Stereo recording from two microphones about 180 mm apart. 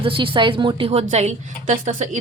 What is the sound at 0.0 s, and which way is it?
Speech, 30° right (ahead or behind).